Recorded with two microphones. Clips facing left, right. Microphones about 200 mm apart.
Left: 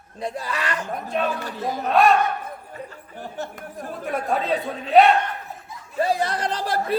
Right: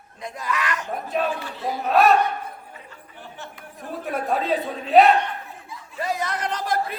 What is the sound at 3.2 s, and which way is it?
Chatter, 40° left (ahead or behind).